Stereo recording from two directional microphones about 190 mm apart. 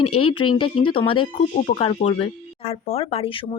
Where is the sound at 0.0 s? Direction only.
30° left (ahead or behind).